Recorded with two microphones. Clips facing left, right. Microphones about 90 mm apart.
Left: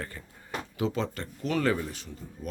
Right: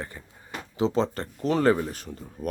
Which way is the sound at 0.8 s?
30° right (ahead or behind).